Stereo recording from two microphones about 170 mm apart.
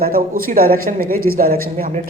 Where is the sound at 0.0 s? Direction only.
60° right (ahead or behind).